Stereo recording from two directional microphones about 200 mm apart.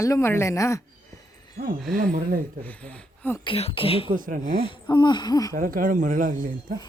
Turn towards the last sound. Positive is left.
turn(degrees=-40)  # may be behind; listen again after turning